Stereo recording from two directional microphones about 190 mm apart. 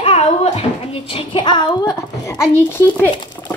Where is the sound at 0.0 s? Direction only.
30° left (ahead or behind).